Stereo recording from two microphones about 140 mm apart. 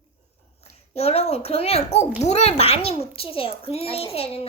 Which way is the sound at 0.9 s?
45° left (ahead or behind).